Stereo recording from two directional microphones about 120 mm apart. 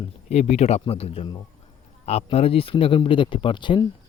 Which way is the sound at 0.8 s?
55° left (ahead or behind).